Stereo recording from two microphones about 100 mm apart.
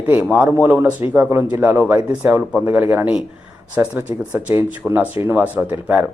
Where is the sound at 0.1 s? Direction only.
15° right (ahead or behind).